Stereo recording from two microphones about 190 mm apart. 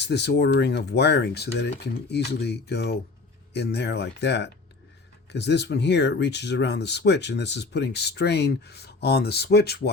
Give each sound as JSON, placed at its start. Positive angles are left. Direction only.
{"t": 0.0, "sound": "speech", "side_deg": 60}